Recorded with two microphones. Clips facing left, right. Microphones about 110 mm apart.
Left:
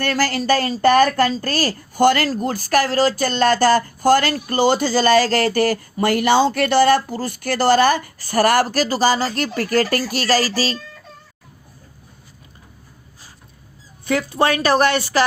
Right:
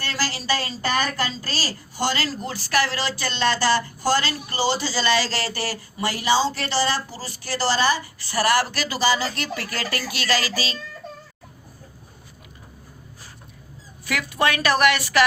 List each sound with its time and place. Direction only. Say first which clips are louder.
0.0 s speech: left 9 dB; 55° left (ahead or behind)
14.0 s a woman's voice: left 5 dB; 30° left (ahead or behind)